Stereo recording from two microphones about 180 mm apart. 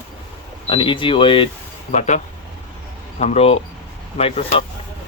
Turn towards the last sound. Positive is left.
turn(degrees=35)  # may be behind; listen again after turning